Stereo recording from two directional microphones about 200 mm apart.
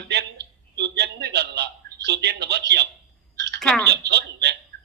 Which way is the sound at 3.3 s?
60° right (ahead or behind).